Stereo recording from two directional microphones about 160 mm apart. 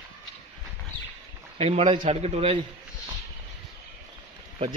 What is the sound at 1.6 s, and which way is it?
Speech, 40° right (ahead or behind).